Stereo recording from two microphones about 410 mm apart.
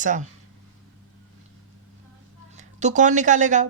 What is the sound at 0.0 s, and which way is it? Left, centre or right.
Speech, centre.